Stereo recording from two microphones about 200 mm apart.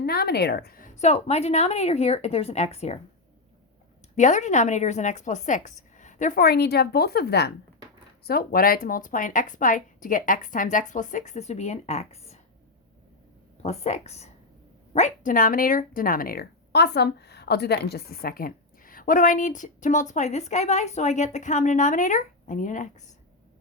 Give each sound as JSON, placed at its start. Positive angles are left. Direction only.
{"t": 0.0, "sound": "speech", "side_deg": 50}
{"t": 4.1, "sound": "speech", "side_deg": 35}
{"t": 13.6, "sound": "speech", "side_deg": 35}